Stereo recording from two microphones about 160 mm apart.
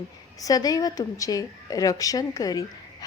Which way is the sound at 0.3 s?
25° left (ahead or behind).